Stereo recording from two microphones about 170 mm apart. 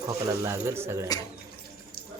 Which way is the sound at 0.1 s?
15° right (ahead or behind).